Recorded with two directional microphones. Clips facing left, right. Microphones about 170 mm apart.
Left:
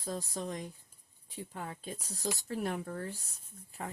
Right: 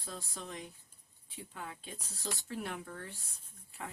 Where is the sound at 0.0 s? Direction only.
40° left (ahead or behind).